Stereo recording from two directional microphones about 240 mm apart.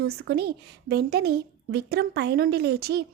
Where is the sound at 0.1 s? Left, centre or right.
Right.